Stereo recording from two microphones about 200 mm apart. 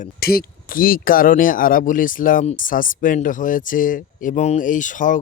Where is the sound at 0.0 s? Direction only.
50° left (ahead or behind).